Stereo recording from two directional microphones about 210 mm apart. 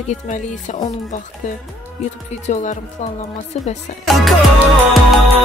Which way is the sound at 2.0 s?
35° left (ahead or behind).